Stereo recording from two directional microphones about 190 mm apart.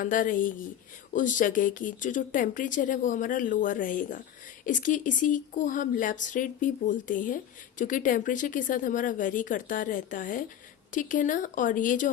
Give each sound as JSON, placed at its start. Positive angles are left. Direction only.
{"t": 0.0, "sound": "speech", "side_deg": 45}